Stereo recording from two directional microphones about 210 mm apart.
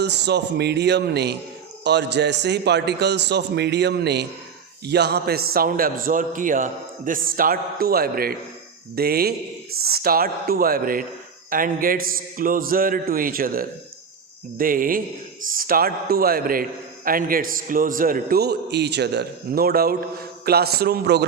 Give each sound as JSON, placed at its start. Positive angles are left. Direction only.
{"t": 0.0, "sound": "a man's voice", "side_deg": -55}